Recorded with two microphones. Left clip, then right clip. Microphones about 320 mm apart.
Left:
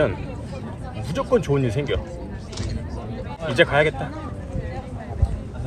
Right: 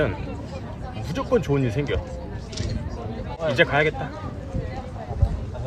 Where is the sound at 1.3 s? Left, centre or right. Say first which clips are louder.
Left 1 dB; centre.